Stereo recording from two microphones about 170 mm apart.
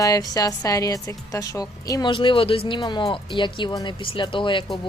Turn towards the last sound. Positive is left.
turn(degrees=30)  # may be behind; listen again after turning